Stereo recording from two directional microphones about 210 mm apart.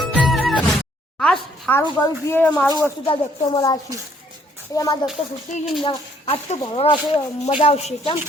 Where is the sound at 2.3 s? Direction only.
10° left (ahead or behind).